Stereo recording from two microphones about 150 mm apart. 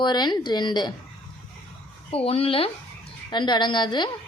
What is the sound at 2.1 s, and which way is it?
A woman's voice, 40° left (ahead or behind).